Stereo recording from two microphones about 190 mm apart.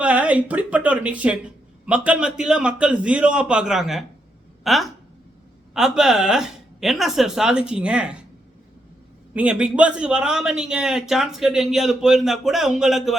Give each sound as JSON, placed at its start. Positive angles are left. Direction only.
{"t": 0.0, "sound": "a man's voice", "side_deg": -5}
{"t": 9.3, "sound": "a man's voice", "side_deg": -5}